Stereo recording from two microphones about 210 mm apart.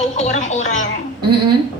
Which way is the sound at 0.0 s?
35° left (ahead or behind).